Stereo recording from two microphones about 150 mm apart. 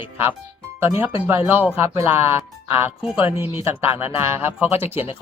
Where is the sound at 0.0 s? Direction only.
15° right (ahead or behind).